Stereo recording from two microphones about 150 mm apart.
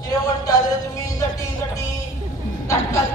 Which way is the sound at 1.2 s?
20° left (ahead or behind).